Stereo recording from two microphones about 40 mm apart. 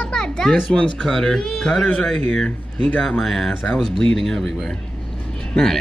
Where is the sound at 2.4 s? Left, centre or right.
Left.